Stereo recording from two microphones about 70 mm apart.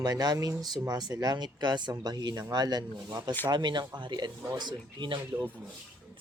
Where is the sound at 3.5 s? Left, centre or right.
Right.